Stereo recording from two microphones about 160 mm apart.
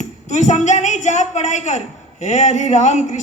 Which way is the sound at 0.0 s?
45° left (ahead or behind).